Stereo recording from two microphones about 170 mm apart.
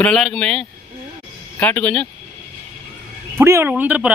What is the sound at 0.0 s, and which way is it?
Speech, 5° left (ahead or behind).